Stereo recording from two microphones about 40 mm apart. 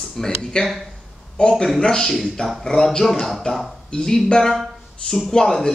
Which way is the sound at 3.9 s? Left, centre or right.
Centre.